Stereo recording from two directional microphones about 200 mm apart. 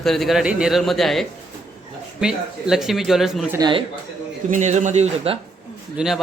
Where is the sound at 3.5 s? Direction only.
20° right (ahead or behind).